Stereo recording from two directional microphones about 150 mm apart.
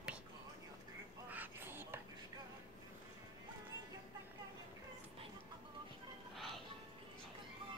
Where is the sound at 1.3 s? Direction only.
15° right (ahead or behind).